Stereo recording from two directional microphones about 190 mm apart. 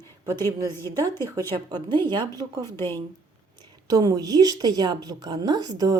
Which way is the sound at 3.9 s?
20° right (ahead or behind).